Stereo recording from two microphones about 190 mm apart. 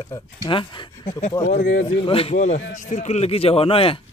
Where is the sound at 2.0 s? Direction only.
30° left (ahead or behind).